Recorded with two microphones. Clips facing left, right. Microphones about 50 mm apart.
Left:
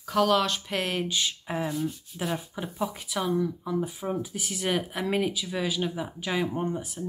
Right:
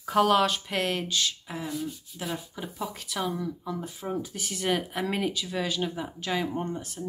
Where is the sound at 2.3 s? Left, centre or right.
Centre.